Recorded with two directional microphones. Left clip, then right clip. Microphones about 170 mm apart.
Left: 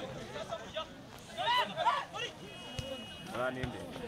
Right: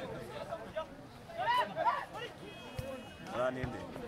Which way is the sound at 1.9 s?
10° left (ahead or behind).